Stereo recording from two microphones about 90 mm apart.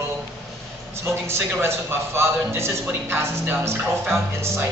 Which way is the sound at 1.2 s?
30° right (ahead or behind).